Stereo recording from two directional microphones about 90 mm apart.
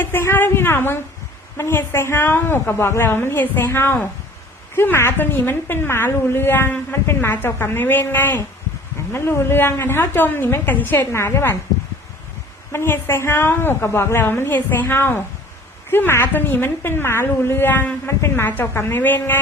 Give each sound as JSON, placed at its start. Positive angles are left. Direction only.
{"t": 0.0, "sound": "a woman's voice", "side_deg": 25}
{"t": 12.7, "sound": "a woman's voice", "side_deg": 30}